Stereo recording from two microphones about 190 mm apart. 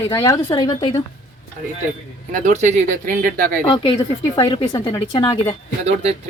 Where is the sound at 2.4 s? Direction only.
40° right (ahead or behind).